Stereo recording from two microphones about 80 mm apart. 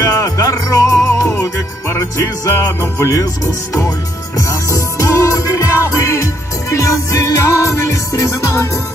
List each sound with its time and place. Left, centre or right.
0.2 s music: left
4.4 s music: left